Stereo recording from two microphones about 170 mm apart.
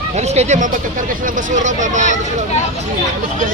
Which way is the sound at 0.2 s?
40° right (ahead or behind).